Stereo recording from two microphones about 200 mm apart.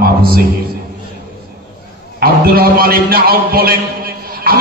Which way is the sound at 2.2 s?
50° right (ahead or behind).